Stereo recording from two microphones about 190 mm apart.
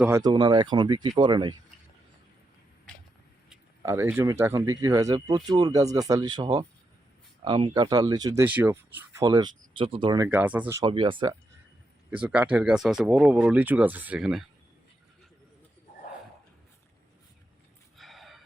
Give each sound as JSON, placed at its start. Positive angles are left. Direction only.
{"t": 0.2, "sound": "speech", "side_deg": -25}
{"t": 3.8, "sound": "speech", "side_deg": -10}
{"t": 8.4, "sound": "speech", "side_deg": -10}
{"t": 10.2, "sound": "speech", "side_deg": -10}
{"t": 10.8, "sound": "speech", "side_deg": -25}
{"t": 12.1, "sound": "speech", "side_deg": -5}
{"t": 17.9, "sound": "a sound", "side_deg": 0}